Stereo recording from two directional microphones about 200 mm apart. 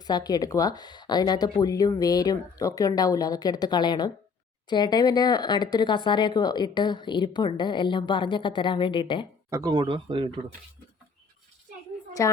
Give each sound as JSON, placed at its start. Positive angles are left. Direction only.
{"t": 0.0, "sound": "speech", "side_deg": 20}
{"t": 9.5, "sound": "speech", "side_deg": -15}
{"t": 12.2, "sound": "a woman's voice", "side_deg": 15}